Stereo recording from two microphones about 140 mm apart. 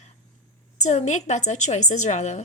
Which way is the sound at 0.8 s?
55° left (ahead or behind).